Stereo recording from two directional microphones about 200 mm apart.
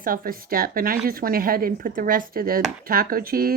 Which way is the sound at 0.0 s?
45° right (ahead or behind).